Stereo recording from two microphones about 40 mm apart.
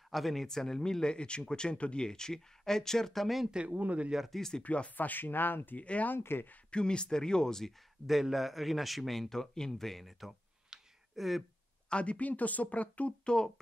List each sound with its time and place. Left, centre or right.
0.1 s speech: centre
3.6 s speech: right
4.3 s speech: centre
4.6 s speech: left
4.9 s speech: left
5.8 s speech: left
6.1 s speech: left
6.7 s speech: left
8.1 s a man's voice: centre
10.7 s a sound: centre
11.1 s a man's voice: centre
11.9 s speech: left
13.2 s speech: left